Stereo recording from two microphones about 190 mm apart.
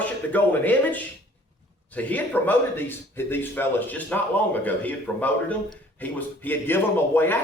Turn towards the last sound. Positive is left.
turn(degrees=10)  # may be behind; listen again after turning